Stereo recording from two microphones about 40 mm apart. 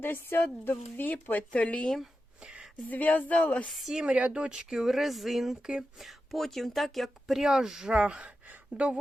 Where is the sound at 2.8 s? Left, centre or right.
Left.